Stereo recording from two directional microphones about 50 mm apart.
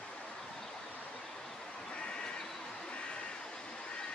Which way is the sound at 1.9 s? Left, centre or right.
Centre.